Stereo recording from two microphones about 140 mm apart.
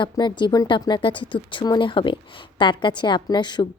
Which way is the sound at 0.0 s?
35° left (ahead or behind).